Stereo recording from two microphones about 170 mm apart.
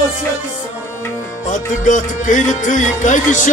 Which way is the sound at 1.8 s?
50° left (ahead or behind).